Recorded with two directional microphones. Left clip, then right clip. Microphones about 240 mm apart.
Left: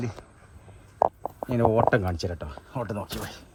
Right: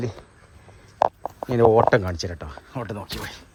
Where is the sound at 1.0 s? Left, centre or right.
Centre.